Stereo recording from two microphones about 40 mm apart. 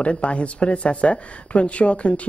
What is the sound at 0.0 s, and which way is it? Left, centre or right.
Speech, left.